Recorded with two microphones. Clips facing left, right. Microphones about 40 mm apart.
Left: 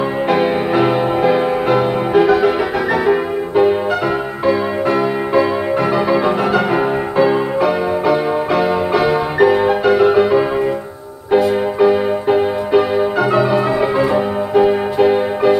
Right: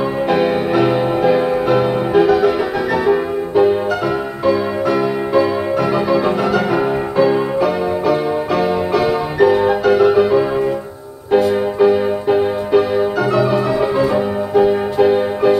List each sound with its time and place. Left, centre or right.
0.3 s music: left